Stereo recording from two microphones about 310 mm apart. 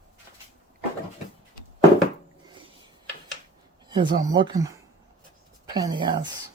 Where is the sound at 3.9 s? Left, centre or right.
Centre.